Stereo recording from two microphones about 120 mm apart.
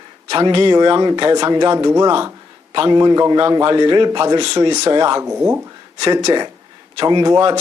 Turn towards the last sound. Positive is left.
turn(degrees=-40)  # may be behind; listen again after turning